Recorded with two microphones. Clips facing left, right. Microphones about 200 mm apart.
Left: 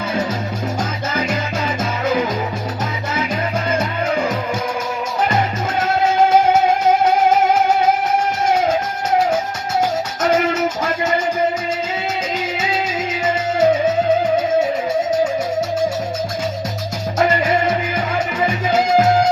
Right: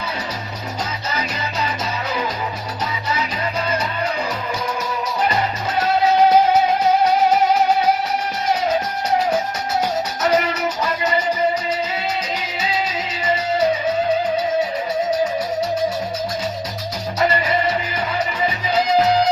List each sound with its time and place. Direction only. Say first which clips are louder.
1.1 s music: left 6 dB; 50° left (ahead or behind)
3.7 s music: left 3 dB; 50° left (ahead or behind)
5.8 s music: right 1 dB; 50° left (ahead or behind)
10.2 s music: left 3 dB; 50° left (ahead or behind)
13.1 s music: even; 50° left (ahead or behind)
17.2 s music: left 3 dB; 50° left (ahead or behind)